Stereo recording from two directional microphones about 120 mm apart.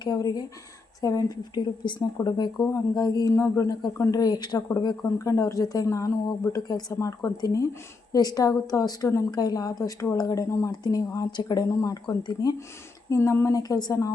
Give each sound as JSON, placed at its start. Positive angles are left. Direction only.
{"t": 0.0, "sound": "speech", "side_deg": 30}